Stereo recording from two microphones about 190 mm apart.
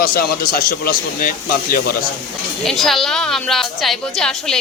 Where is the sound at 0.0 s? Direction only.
50° left (ahead or behind).